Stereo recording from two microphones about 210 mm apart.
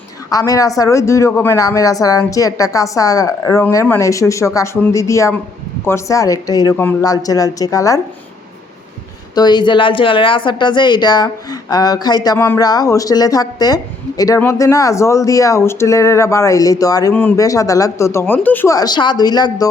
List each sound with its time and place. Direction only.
0.3 s speech: 15° left (ahead or behind)
9.3 s a woman's voice: 20° left (ahead or behind)